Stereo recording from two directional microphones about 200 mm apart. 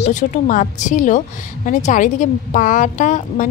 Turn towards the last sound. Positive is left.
turn(degrees=40)  # may be behind; listen again after turning